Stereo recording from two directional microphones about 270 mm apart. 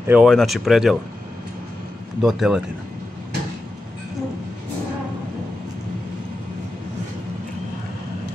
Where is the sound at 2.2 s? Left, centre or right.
Centre.